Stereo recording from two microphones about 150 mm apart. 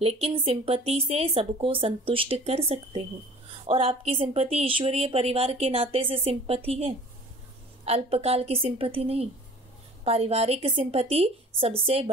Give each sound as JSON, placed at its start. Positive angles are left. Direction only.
{"t": 0.0, "sound": "a woman's voice", "side_deg": -40}